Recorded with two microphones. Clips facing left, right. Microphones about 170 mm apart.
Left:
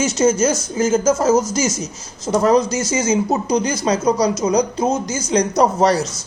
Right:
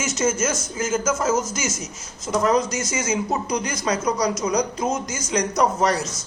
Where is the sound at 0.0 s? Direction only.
35° left (ahead or behind).